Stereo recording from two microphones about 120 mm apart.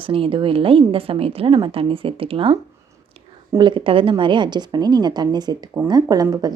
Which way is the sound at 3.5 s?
40° right (ahead or behind).